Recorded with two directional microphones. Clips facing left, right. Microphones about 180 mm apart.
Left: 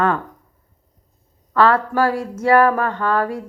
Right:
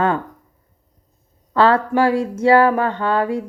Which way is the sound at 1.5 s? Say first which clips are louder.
Right 1 dB; 30° right (ahead or behind).